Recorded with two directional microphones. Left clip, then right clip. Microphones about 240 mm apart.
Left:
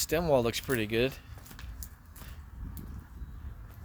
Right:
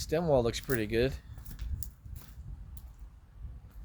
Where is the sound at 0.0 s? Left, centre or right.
Left.